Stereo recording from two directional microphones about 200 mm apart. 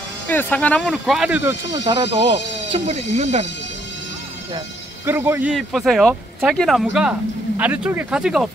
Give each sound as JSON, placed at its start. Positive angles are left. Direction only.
{"t": 0.3, "sound": "speech", "side_deg": 10}
{"t": 2.0, "sound": "speech", "side_deg": -35}
{"t": 4.6, "sound": "speech", "side_deg": -10}